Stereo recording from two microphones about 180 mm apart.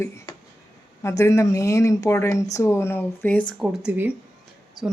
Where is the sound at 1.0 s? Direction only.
15° left (ahead or behind).